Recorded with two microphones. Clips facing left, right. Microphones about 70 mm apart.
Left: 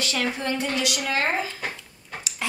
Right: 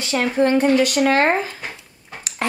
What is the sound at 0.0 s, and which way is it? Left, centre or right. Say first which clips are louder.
Speech: right 8 dB; right.